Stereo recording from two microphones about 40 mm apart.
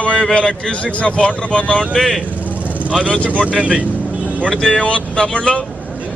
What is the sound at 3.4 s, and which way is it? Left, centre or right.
Speech, right.